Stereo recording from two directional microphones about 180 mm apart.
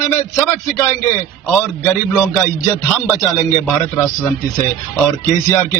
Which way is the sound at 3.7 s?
5° left (ahead or behind).